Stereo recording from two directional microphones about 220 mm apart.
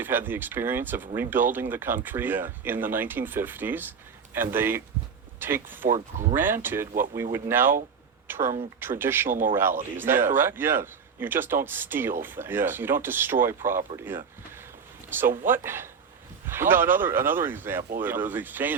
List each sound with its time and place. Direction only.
0.0 s speech: 10° right (ahead or behind)
5.8 s speech: 35° right (ahead or behind)
6.3 s speech: 10° right (ahead or behind)
6.9 s speech: 40° right (ahead or behind)
7.2 s speech: 10° right (ahead or behind)
13.6 s speech: 35° right (ahead or behind)
13.9 s speech: 10° right (ahead or behind)